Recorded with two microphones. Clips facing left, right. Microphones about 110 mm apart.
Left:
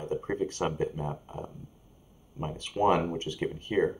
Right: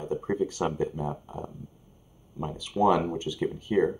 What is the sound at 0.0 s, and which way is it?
Speech, 5° right (ahead or behind).